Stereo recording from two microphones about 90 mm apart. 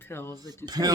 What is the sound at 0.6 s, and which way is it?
Speech, 45° right (ahead or behind).